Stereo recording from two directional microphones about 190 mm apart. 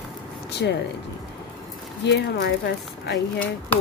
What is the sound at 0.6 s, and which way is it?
Speech, 60° left (ahead or behind).